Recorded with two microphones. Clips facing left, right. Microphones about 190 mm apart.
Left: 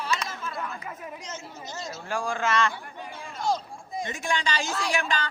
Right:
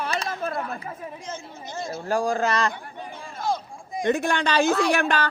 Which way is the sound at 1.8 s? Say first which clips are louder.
Right 7 dB; 55° right (ahead or behind).